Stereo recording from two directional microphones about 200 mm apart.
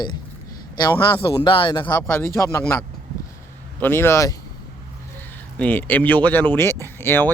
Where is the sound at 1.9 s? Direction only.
10° left (ahead or behind).